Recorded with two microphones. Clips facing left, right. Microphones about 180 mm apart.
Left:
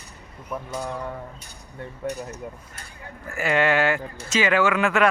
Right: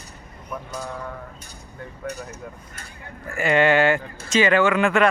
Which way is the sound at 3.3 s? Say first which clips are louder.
Right 3 dB; centre (ahead or behind).